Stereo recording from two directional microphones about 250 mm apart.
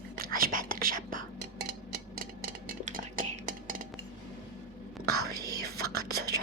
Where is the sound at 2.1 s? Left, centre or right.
Right.